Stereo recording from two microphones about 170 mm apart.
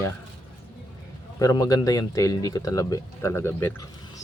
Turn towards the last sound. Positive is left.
turn(degrees=15)  # may be behind; listen again after turning